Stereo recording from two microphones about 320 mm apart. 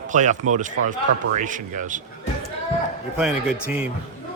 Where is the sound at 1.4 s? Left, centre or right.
Right.